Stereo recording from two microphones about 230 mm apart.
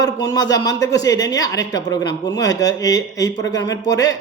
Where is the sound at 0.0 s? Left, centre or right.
Centre.